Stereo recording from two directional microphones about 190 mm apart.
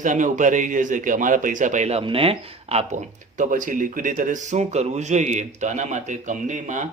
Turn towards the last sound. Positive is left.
turn(degrees=-40)  # may be behind; listen again after turning